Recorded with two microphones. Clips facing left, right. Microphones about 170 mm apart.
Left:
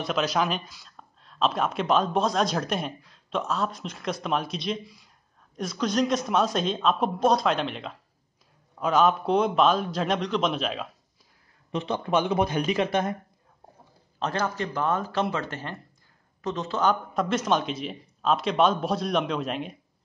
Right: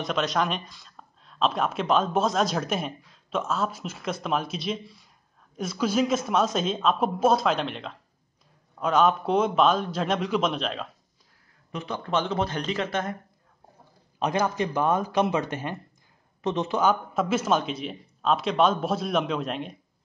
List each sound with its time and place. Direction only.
0.0 s speech: centre (ahead or behind)
11.7 s speech: 25° left (ahead or behind)
14.2 s speech: 15° right (ahead or behind)
16.8 s speech: 5° right (ahead or behind)